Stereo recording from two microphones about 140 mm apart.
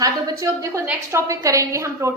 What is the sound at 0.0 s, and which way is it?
A woman's voice, 25° right (ahead or behind).